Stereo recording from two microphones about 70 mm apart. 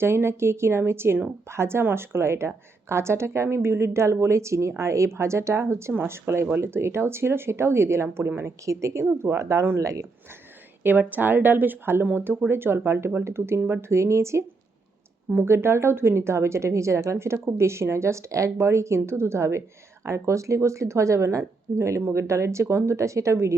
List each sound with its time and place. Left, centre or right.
0.0 s a woman's voice: right
10.8 s a woman's voice: right